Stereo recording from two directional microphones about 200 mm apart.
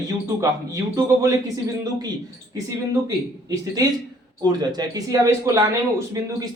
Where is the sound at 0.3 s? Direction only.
15° right (ahead or behind).